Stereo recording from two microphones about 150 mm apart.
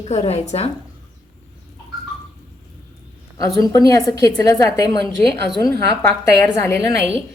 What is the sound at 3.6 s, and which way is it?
A woman's voice, 25° left (ahead or behind).